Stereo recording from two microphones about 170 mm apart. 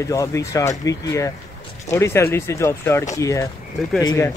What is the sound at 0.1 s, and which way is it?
Speech, 20° left (ahead or behind).